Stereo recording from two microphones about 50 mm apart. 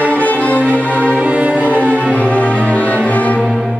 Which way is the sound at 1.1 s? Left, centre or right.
Right.